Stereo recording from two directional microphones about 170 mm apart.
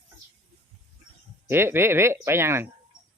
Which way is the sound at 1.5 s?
15° right (ahead or behind).